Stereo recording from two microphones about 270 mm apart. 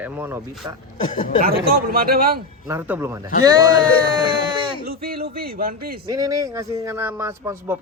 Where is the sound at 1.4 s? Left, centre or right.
Right.